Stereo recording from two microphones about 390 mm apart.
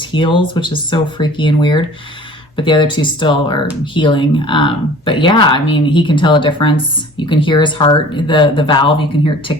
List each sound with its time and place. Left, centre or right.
0.1 s speech: centre